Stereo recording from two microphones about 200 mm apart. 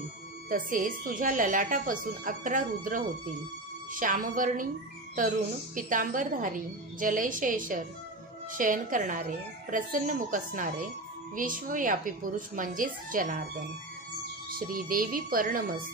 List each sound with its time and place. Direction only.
0.5 s a woman's voice: 45° right (ahead or behind)
5.8 s a woman's voice: 40° right (ahead or behind)
14.5 s a woman's voice: 45° right (ahead or behind)